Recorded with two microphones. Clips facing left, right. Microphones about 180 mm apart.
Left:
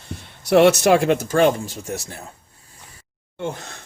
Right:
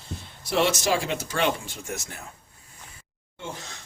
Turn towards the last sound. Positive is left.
turn(degrees=55)  # may be behind; listen again after turning